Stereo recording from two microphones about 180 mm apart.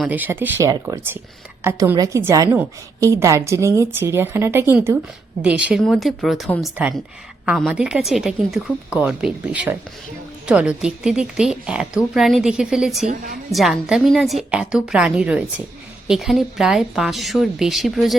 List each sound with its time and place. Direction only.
0.0 s a woman's voice: 10° right (ahead or behind)